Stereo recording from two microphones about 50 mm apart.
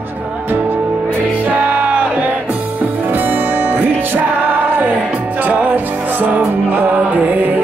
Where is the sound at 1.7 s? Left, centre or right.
Right.